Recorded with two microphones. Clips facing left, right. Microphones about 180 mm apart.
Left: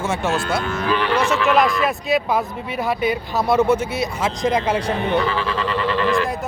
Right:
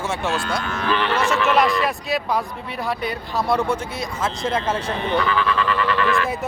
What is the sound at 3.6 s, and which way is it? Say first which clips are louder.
Speech: left 6 dB; 5° left (ahead or behind).